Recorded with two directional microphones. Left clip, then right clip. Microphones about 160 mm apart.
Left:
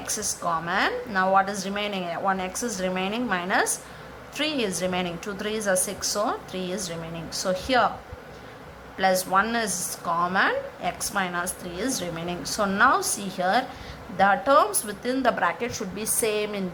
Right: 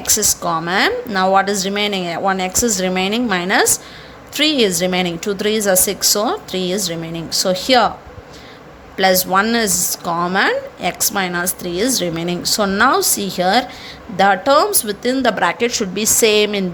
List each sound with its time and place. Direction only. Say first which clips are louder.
0.0 s a woman's voice: right 11 dB; 45° right (ahead or behind)
9.0 s a woman's voice: right 8 dB; 45° right (ahead or behind)